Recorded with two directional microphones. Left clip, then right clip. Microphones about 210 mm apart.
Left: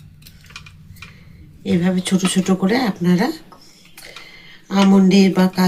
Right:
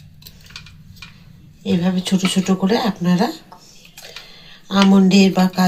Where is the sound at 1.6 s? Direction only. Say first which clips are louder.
Left 1 dB; 20° left (ahead or behind).